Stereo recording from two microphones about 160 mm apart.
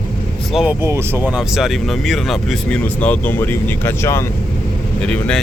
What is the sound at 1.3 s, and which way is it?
Speech, 5° right (ahead or behind).